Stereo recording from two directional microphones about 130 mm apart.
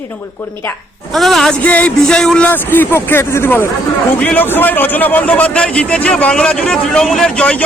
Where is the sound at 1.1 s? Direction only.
Centre (ahead or behind).